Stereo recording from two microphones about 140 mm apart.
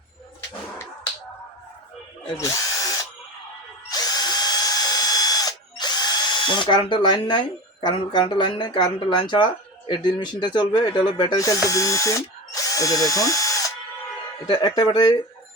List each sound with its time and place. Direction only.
2.4 s drill: 25° left (ahead or behind)
9.9 s speech: 30° left (ahead or behind)
14.4 s speech: 35° left (ahead or behind)